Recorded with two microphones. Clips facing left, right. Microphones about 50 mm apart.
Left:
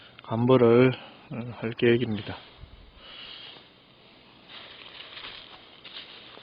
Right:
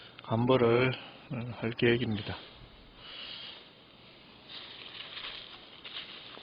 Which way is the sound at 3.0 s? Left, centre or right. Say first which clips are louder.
Left 1 dB; centre.